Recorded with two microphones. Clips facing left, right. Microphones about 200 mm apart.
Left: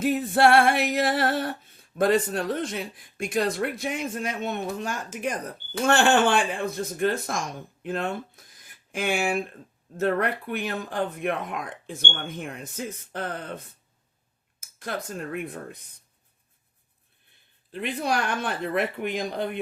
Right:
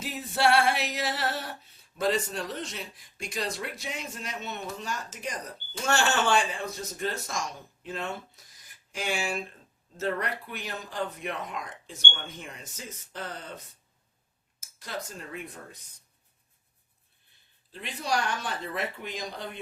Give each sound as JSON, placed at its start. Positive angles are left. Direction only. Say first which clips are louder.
{"t": 0.0, "sound": "female singing", "louder": "left 7 dB", "side_deg": 55}
{"t": 14.6, "sound": "speech", "louder": "left 5 dB", "side_deg": 55}
{"t": 17.7, "sound": "female singing", "louder": "left 4 dB", "side_deg": 60}